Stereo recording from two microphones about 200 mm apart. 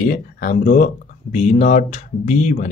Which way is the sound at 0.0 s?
40° left (ahead or behind).